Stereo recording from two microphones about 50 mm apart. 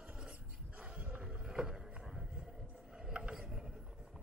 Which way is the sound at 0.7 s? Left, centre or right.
Right.